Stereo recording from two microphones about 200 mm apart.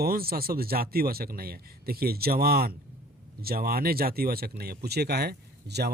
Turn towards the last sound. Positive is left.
turn(degrees=-55)  # may be behind; listen again after turning